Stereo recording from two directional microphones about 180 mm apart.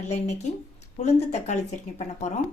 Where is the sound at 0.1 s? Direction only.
40° left (ahead or behind).